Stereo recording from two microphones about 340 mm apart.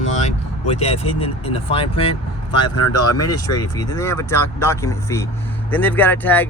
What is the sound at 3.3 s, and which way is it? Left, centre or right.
Speech, centre.